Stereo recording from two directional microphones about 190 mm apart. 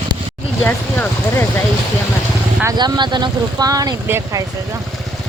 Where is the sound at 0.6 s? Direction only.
10° left (ahead or behind).